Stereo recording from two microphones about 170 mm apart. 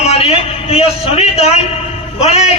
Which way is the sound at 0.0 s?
35° left (ahead or behind).